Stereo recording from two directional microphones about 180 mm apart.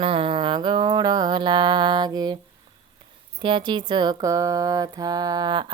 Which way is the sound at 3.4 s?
25° right (ahead or behind).